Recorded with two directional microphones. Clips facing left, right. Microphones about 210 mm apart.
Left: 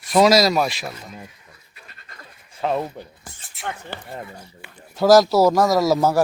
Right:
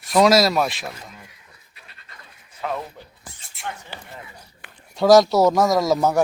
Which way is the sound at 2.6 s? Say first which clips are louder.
Left 5 dB; 30° left (ahead or behind).